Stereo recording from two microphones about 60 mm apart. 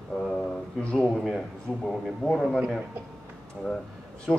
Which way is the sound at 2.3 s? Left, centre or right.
Centre.